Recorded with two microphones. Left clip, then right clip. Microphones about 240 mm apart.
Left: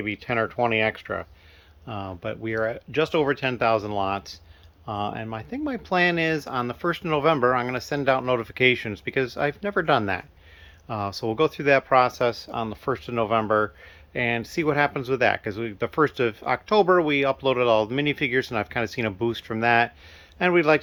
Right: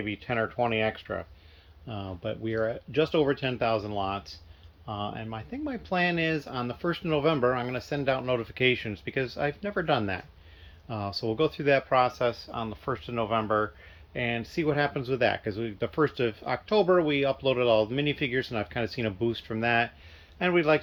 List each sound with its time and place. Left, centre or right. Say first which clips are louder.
0.0 s speech: left 4 dB; left